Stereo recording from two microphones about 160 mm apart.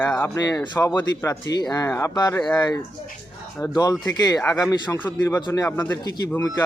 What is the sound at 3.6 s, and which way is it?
Speech, 25° left (ahead or behind).